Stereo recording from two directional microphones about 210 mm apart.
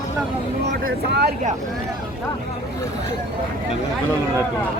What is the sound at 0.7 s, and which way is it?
Speech, 55° right (ahead or behind).